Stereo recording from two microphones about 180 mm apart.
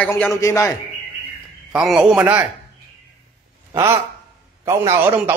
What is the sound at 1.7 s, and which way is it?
Speech, 5° right (ahead or behind).